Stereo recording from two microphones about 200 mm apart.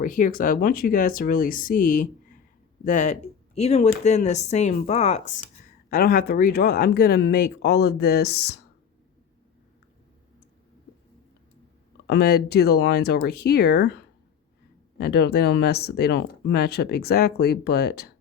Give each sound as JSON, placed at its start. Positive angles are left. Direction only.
{"t": 0.0, "sound": "speech", "side_deg": 45}
{"t": 5.9, "sound": "speech", "side_deg": 50}
{"t": 12.0, "sound": "speech", "side_deg": 50}